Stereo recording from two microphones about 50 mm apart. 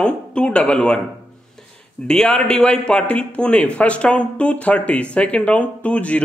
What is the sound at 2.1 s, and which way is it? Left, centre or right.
A man's voice, centre.